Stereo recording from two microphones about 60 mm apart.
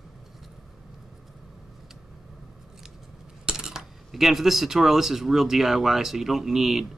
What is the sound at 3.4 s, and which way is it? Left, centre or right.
Speech, centre.